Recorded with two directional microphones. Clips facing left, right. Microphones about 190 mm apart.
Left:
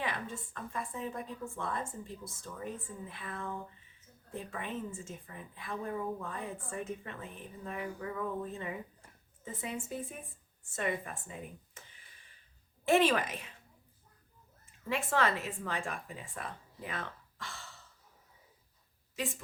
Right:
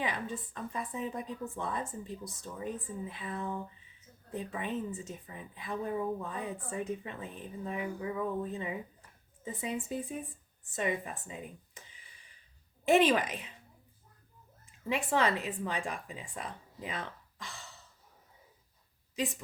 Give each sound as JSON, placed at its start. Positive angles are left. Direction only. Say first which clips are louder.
{"t": 0.0, "sound": "a woman's voice", "louder": "right 2 dB", "side_deg": -15}
{"t": 12.8, "sound": "a woman's voice", "louder": "right 2 dB", "side_deg": -15}
{"t": 14.8, "sound": "a woman's voice", "louder": "right 2 dB", "side_deg": -15}
{"t": 19.1, "sound": "a woman's voice", "louder": "right 3 dB", "side_deg": -15}